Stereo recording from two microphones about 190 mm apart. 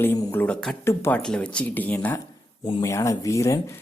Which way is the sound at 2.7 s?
25° left (ahead or behind).